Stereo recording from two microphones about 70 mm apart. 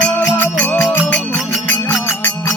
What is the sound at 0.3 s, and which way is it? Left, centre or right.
Music, left.